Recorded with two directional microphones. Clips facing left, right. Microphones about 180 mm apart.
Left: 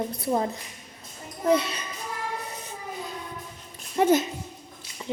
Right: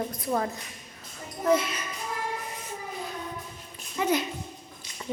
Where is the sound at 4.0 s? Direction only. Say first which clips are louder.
Left 6 dB; 50° left (ahead or behind).